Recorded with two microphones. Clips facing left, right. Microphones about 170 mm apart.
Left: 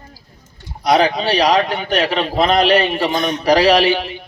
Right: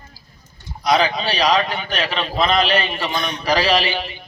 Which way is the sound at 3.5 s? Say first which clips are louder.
Left 6 dB; 65° left (ahead or behind).